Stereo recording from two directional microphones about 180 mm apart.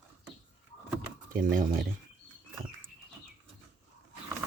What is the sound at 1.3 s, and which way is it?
Speech, 50° right (ahead or behind).